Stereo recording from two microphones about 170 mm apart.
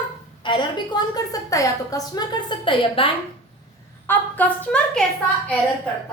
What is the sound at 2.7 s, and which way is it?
Speech, 30° left (ahead or behind).